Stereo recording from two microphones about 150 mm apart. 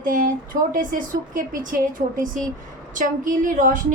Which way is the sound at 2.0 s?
80° right.